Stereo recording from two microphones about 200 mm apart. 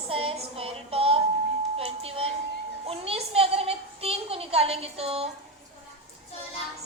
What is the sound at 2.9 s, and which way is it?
A woman's voice, 30° right (ahead or behind).